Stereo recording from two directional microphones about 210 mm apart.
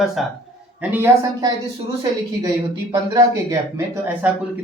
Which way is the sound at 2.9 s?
15° right (ahead or behind).